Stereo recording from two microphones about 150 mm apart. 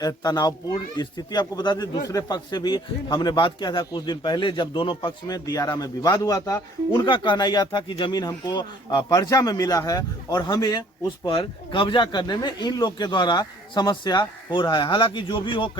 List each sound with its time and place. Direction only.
0.0 s speech: 25° left (ahead or behind)